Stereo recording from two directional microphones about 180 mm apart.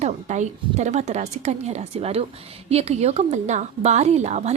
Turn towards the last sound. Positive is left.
turn(degrees=-40)  # may be behind; listen again after turning